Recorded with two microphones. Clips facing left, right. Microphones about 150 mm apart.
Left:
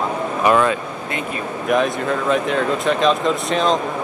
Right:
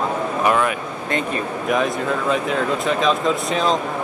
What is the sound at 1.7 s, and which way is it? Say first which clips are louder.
Speech: left 2 dB; centre (ahead or behind).